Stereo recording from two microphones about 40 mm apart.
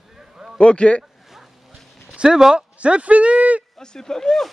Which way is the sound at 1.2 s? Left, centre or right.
Centre.